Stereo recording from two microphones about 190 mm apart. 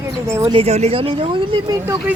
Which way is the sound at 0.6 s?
35° right (ahead or behind).